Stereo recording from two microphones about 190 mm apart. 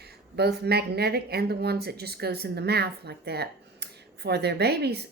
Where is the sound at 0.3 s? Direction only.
55° right (ahead or behind).